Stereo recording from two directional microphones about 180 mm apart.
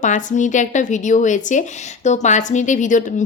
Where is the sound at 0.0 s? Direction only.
45° left (ahead or behind).